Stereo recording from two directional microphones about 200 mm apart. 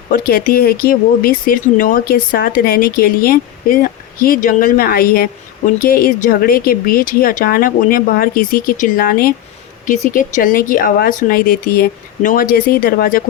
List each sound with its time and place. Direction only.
0.1 s speech: 45° left (ahead or behind)